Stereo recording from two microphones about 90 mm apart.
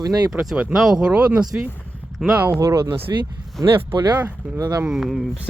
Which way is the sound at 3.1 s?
55° right (ahead or behind).